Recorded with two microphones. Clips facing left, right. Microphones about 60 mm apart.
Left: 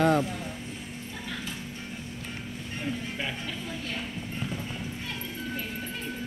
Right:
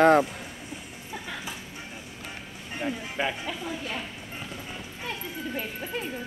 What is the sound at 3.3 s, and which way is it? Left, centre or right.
Speech, centre.